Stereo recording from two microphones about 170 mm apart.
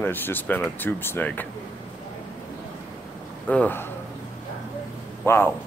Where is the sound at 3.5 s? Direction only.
10° left (ahead or behind).